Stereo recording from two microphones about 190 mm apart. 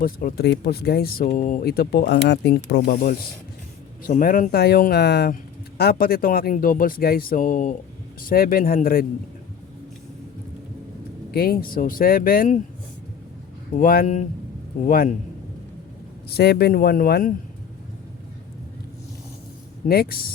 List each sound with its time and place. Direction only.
0.0 s speech: 50° left (ahead or behind)
11.3 s speech: 55° left (ahead or behind)
13.7 s speech: 50° left (ahead or behind)
16.3 s speech: 60° left (ahead or behind)
19.9 s speech: 55° left (ahead or behind)